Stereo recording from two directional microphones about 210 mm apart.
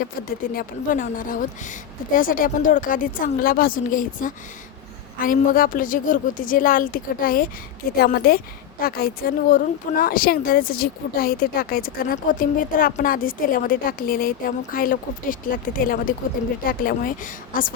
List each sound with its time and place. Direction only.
0.3 s a woman's voice: 40° left (ahead or behind)